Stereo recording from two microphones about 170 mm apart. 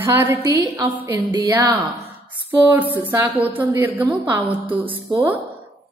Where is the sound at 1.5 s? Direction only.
10° right (ahead or behind).